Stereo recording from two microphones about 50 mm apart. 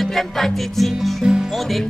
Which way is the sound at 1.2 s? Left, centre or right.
Centre.